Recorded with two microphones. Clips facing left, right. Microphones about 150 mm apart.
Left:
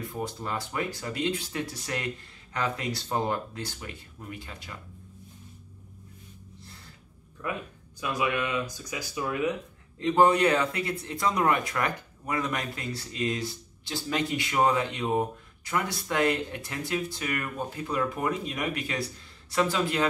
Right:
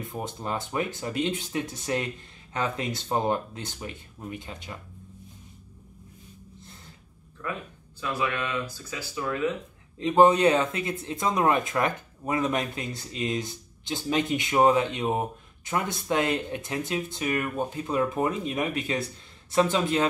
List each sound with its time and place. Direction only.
0.0 s speech: 20° right (ahead or behind)
7.4 s speech: 15° left (ahead or behind)
9.9 s speech: 20° right (ahead or behind)